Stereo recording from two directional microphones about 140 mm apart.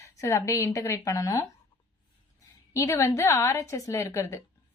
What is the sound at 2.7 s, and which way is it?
Speech, 25° left (ahead or behind).